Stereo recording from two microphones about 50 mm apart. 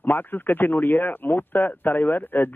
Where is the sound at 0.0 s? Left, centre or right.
Left.